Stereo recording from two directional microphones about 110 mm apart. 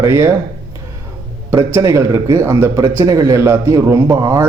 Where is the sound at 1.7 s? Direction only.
25° right (ahead or behind).